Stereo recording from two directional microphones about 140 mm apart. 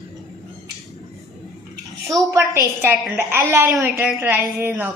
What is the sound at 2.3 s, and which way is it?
A woman's voice, 15° right (ahead or behind).